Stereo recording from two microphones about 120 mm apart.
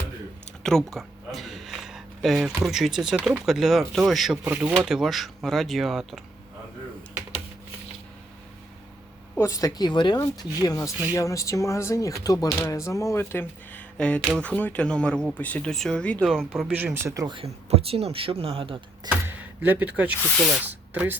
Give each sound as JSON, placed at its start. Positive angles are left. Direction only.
{"t": 0.6, "sound": "a sound", "side_deg": 5}
{"t": 2.6, "sound": "speech", "side_deg": 0}
{"t": 4.4, "sound": "speech", "side_deg": -10}
{"t": 9.4, "sound": "speech", "side_deg": 25}
{"t": 16.2, "sound": "speech", "side_deg": -5}
{"t": 16.8, "sound": "speech", "side_deg": -20}
{"t": 17.2, "sound": "speech", "side_deg": -45}
{"t": 17.7, "sound": "speech", "side_deg": -55}
{"t": 19.0, "sound": "speech", "side_deg": -15}